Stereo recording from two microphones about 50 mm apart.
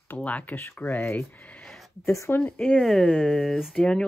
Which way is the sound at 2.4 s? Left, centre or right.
Left.